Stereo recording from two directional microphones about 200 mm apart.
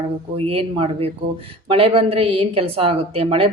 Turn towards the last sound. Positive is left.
turn(degrees=-30)  # may be behind; listen again after turning